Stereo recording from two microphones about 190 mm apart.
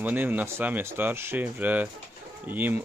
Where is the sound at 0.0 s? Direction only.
10° right (ahead or behind).